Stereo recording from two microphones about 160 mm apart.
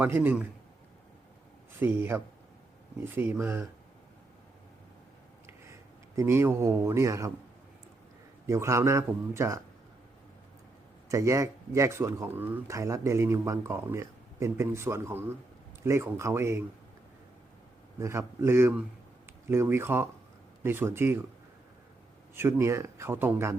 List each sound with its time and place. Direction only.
0.0 s speech: 10° right (ahead or behind)
1.8 s speech: 10° right (ahead or behind)
6.1 s speech: 15° right (ahead or behind)
8.4 s speech: 20° right (ahead or behind)
11.1 s speech: 20° right (ahead or behind)
18.0 s speech: 20° right (ahead or behind)
22.4 s speech: 15° right (ahead or behind)